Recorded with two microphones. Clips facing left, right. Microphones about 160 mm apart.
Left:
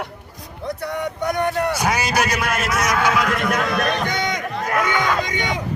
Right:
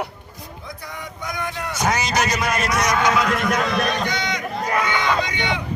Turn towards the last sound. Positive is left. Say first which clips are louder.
# left 1 dB
turn(degrees=45)  # may be behind; listen again after turning